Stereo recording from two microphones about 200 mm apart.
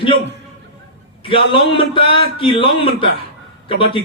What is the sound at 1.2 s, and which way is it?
A man's voice, 25° left (ahead or behind).